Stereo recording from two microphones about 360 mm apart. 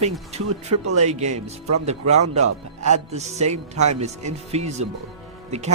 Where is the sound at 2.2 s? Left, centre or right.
Right.